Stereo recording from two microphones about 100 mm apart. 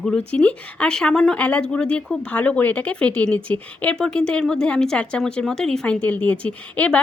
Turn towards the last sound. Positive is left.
turn(degrees=15)  # may be behind; listen again after turning